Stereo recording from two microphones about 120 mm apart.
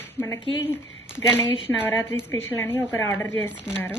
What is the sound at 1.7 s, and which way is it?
A woman's voice, 20° left (ahead or behind).